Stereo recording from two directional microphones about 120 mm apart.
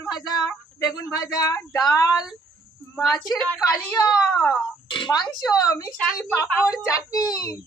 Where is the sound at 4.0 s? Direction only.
30° left (ahead or behind).